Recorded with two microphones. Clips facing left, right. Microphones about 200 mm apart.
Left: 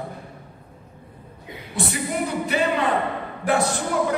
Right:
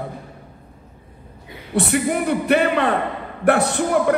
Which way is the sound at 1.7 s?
60° right (ahead or behind).